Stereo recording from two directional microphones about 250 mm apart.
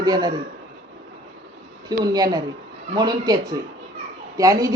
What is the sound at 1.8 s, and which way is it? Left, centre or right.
Speech, centre.